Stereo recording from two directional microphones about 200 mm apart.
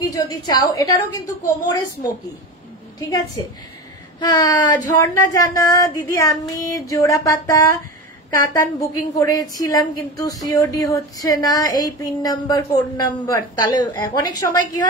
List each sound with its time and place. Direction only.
0.0 s a woman's voice: 20° left (ahead or behind)